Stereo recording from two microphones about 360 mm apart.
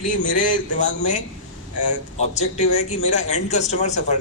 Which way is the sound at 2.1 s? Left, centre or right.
Centre.